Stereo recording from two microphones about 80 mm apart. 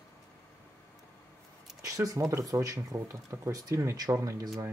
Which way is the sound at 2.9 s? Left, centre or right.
Right.